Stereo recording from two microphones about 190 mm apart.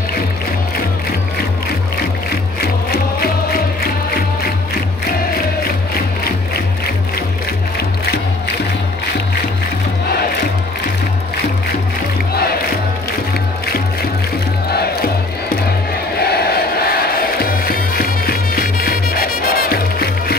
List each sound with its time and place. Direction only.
14.7 s crowd: 55° left (ahead or behind)
16.2 s music: 55° left (ahead or behind)